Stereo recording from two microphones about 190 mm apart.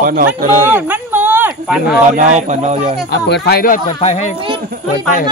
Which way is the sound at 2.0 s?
40° right (ahead or behind).